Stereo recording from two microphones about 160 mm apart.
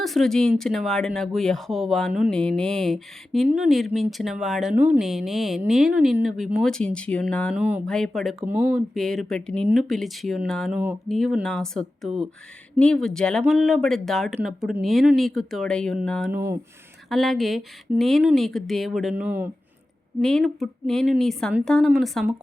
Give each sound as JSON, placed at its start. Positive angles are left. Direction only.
{"t": 0.0, "sound": "speech", "side_deg": 0}
{"t": 7.5, "sound": "speech", "side_deg": -10}
{"t": 7.9, "sound": "speech", "side_deg": 5}
{"t": 16.3, "sound": "speech", "side_deg": -15}
{"t": 17.1, "sound": "speech", "side_deg": 0}
{"t": 20.2, "sound": "speech", "side_deg": 5}